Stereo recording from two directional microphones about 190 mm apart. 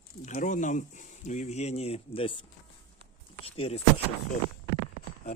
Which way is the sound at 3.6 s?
30° left (ahead or behind).